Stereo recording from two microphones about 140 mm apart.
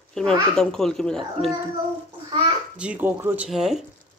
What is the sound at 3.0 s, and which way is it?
Speech, 15° right (ahead or behind).